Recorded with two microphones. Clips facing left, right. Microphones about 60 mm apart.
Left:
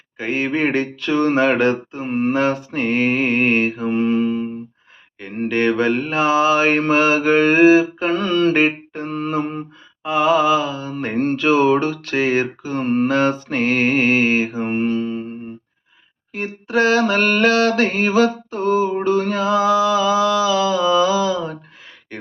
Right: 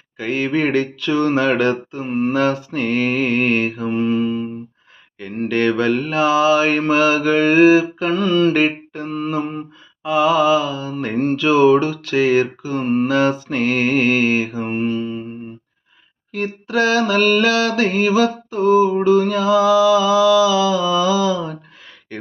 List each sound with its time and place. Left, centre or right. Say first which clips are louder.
0.2 s speech: right 1 dB; left
5.2 s speech: right 1 dB; left
8.1 s mantra: right 2 dB; left
8.5 s a sound: even; left
9.1 s mantra: even; left
10.0 s speech: right 1 dB; left
12.8 s mantra: even; left
13.1 s speech: right 1 dB; left
14.7 s mantra: left 1 dB; left
16.6 s mantra: left 1 dB; left